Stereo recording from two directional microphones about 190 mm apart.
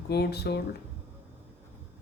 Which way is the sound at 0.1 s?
60° left (ahead or behind).